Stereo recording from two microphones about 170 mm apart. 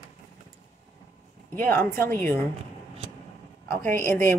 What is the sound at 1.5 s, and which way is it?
Speech, 10° left (ahead or behind).